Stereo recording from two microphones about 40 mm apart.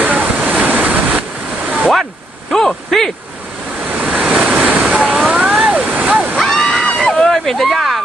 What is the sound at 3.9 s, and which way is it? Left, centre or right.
Vehicle, right.